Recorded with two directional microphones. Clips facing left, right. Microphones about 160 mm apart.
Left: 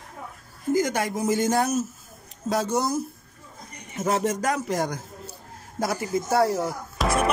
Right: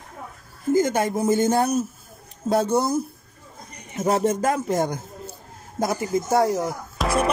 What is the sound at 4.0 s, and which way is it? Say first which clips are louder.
Speech: right 3 dB; 35° right (ahead or behind).